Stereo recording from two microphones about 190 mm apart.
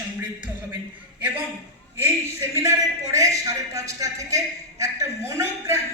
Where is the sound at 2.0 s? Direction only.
15° right (ahead or behind).